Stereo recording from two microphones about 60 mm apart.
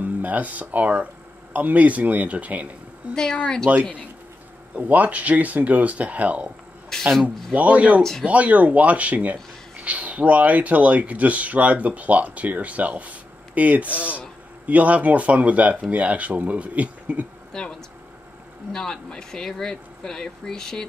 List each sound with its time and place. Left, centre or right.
0.0 s speech: right
6.9 s speech: centre
7.5 s speech: right
8.0 s speech: centre
8.3 s speech: right
17.5 s speech: centre